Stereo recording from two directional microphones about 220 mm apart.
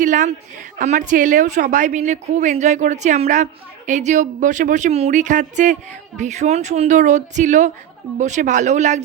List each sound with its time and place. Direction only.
0.0 s a woman's voice: 35° right (ahead or behind)